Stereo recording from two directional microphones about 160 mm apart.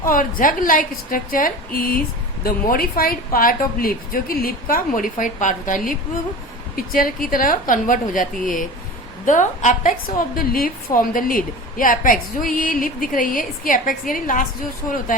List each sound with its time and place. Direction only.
0.0 s a woman's voice: 60° left (ahead or behind)
10.3 s a woman's voice: 65° left (ahead or behind)